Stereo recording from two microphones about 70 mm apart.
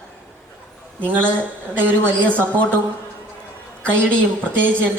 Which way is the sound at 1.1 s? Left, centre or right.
Right.